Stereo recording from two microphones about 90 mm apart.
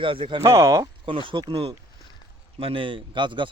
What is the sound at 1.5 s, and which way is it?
Speech, 90° right.